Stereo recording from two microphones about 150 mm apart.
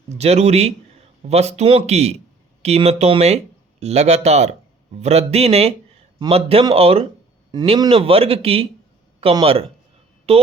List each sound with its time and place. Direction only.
0.1 s a man's voice: 45° right (ahead or behind)